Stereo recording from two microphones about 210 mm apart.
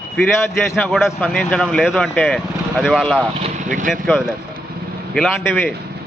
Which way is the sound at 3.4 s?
35° right (ahead or behind).